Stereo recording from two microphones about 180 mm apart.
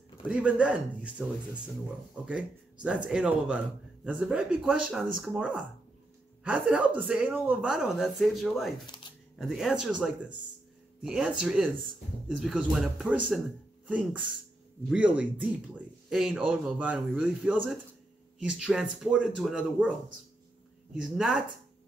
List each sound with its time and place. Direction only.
0.3 s a man's voice: 5° right (ahead or behind)
8.8 s speech: 25° left (ahead or behind)
9.4 s a man's voice: centre (ahead or behind)
20.9 s a man's voice: 5° right (ahead or behind)